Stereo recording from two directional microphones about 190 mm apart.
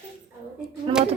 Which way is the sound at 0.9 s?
25° right (ahead or behind).